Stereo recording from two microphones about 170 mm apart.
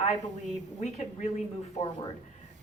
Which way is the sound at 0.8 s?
45° left (ahead or behind).